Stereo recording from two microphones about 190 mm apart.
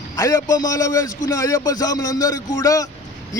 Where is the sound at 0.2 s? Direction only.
20° left (ahead or behind).